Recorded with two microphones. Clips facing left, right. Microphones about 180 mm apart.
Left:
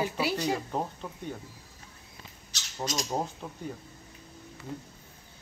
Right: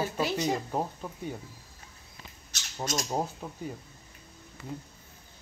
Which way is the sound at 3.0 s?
10° right (ahead or behind).